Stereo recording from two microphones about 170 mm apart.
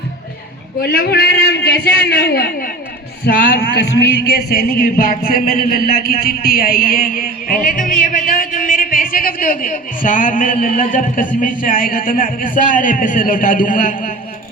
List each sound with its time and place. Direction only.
0.8 s a man's voice: 60° left (ahead or behind)